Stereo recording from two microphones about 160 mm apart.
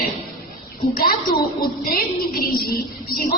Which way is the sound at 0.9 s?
65° left (ahead or behind).